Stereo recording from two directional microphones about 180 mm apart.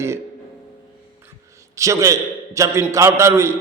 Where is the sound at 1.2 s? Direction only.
15° right (ahead or behind).